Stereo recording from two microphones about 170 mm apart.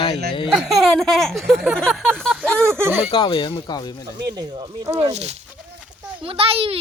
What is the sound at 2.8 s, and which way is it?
Speech, 10° right (ahead or behind).